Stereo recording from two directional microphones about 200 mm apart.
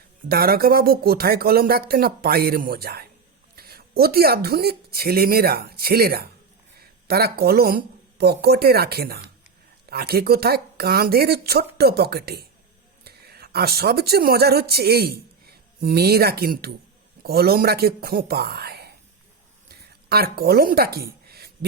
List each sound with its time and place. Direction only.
0.3 s a woman's voice: 50° right (ahead or behind)
20.1 s speech: 50° right (ahead or behind)